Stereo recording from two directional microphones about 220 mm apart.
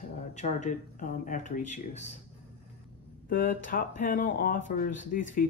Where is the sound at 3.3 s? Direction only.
40° left (ahead or behind).